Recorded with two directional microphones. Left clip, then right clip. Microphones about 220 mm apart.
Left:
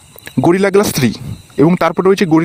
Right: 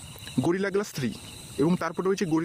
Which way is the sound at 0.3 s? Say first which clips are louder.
Left 15 dB; 45° left (ahead or behind).